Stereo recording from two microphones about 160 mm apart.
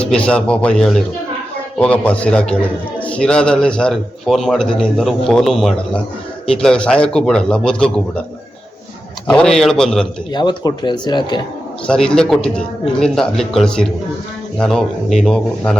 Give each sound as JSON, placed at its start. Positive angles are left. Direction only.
{"t": 0.0, "sound": "a man's voice", "side_deg": 5}
{"t": 9.3, "sound": "a man's voice", "side_deg": 5}
{"t": 10.3, "sound": "speech", "side_deg": 25}
{"t": 11.9, "sound": "a man's voice", "side_deg": 5}